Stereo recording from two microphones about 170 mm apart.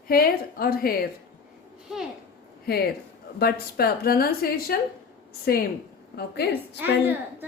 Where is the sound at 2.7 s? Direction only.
65° left (ahead or behind).